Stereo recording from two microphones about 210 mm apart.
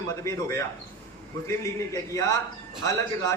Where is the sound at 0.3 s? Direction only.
15° left (ahead or behind).